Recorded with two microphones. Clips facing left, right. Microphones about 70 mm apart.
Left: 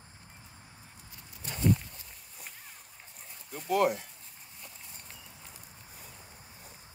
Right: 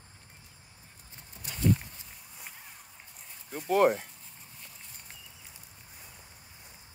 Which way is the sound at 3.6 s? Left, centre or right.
Right.